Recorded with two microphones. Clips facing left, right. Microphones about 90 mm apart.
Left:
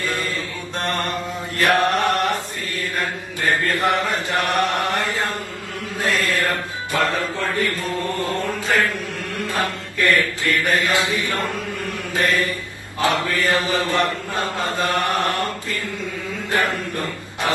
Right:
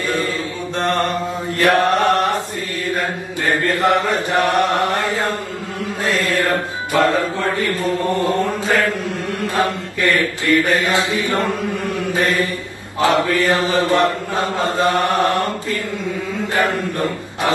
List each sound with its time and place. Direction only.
1.6 s chant: 20° right (ahead or behind)
3.4 s chant: 20° right (ahead or behind)
6.2 s mantra: 20° right (ahead or behind)